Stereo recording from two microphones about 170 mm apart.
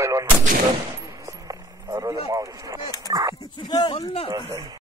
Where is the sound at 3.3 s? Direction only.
25° left (ahead or behind).